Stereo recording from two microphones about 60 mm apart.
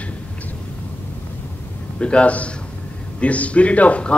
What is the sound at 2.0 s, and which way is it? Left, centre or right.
A man's voice, centre.